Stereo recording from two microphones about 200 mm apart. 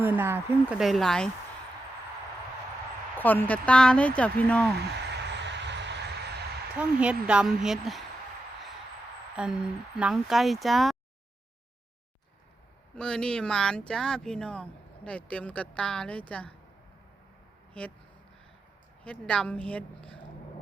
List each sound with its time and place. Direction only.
0.0 s speech: 10° right (ahead or behind)
3.2 s speech: 10° left (ahead or behind)
5.4 s vehicle: 60° right (ahead or behind)
6.7 s speech: 5° right (ahead or behind)
9.3 s speech: 5° right (ahead or behind)
13.0 s speech: 5° left (ahead or behind)
19.0 s speech: 5° left (ahead or behind)